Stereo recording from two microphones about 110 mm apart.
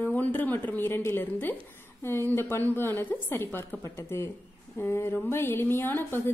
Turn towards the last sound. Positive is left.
turn(degrees=20)  # may be behind; listen again after turning